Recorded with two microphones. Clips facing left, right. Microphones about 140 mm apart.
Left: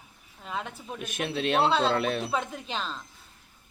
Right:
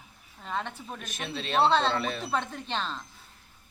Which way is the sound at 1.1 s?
55° left (ahead or behind).